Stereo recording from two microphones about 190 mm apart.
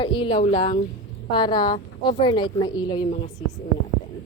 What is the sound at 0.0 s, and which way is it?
A woman's voice, 25° left (ahead or behind).